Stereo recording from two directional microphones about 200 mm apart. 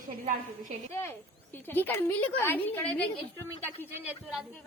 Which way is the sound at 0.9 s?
10° left (ahead or behind).